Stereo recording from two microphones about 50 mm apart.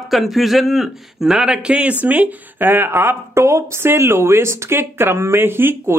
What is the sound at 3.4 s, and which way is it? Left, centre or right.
Speech, right.